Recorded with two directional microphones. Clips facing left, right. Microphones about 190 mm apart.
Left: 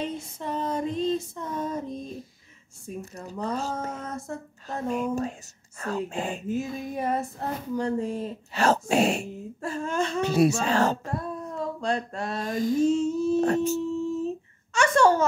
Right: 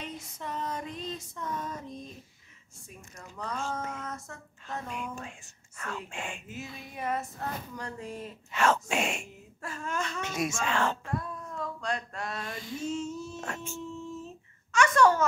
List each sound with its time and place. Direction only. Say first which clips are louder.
0.0 s female singing: left 8 dB; 30° left (ahead or behind)
3.0 s speech: left 8 dB; 35° left (ahead or behind)
14.7 s a sound: left 3 dB; 30° left (ahead or behind)